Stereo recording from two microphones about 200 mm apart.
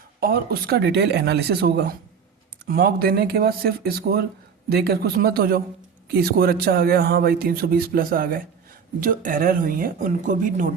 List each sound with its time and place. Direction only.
0.2 s a man's voice: 50° right (ahead or behind)